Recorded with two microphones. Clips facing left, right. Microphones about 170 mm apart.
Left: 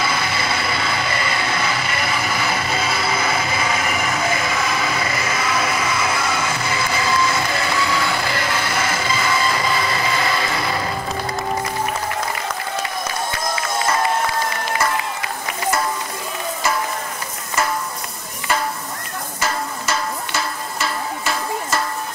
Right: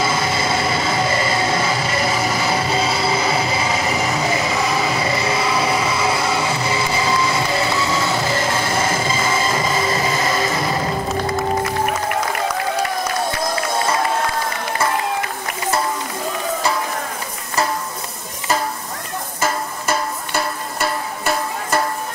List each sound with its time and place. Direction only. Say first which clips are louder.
0.0 s train: right 3 dB; 40° right (ahead or behind)
4.6 s a sound: right 3 dB; 35° right (ahead or behind)
9.8 s music: right 2 dB; 40° right (ahead or behind)
19.4 s music: right 2 dB; 55° right (ahead or behind)